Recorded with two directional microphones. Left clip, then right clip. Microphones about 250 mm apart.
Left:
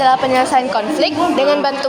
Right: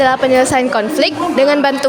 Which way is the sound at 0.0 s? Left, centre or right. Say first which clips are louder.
Right 2 dB; right.